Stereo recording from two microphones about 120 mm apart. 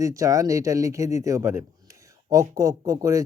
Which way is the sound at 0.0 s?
25° right (ahead or behind).